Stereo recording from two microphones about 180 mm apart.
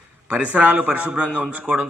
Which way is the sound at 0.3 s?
5° right (ahead or behind).